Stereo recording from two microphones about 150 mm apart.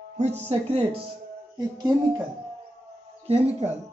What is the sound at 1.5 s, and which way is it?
Speech, 25° right (ahead or behind).